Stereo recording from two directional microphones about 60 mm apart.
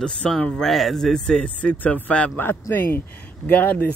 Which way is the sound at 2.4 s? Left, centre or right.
Left.